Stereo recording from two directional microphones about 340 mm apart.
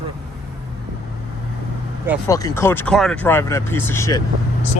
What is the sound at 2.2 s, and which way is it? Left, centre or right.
Speech, centre.